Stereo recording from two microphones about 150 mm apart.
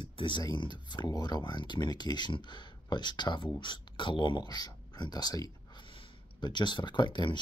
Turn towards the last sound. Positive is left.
turn(degrees=30)  # may be behind; listen again after turning